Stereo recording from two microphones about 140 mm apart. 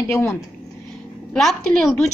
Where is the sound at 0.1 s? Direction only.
20° left (ahead or behind).